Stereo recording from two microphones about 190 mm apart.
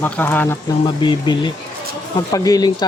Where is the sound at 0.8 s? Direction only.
25° left (ahead or behind).